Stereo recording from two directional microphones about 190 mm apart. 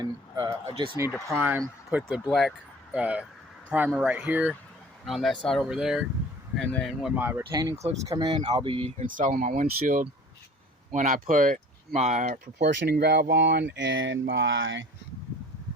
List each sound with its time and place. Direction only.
0.0 s speech: 20° right (ahead or behind)
1.4 s speech: 10° right (ahead or behind); by 9.0 s 30° right (ahead or behind)
9.0 s speech: 45° right (ahead or behind)
12.2 s speech: 55° right (ahead or behind); by 14.8 s 80° right